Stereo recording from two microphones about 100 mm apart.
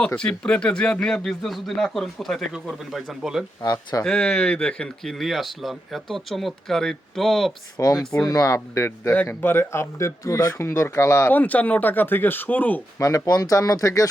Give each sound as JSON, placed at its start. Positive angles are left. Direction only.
{"t": 0.2, "sound": "speech", "side_deg": 10}
{"t": 3.6, "sound": "speech", "side_deg": 40}
{"t": 4.0, "sound": "speech", "side_deg": 10}
{"t": 7.8, "sound": "speech", "side_deg": 30}
{"t": 11.3, "sound": "speech", "side_deg": 15}
{"t": 13.0, "sound": "speech", "side_deg": 35}